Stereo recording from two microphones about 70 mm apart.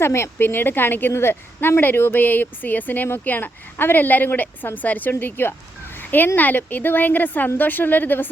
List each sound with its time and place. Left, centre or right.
0.0 s a woman's voice: left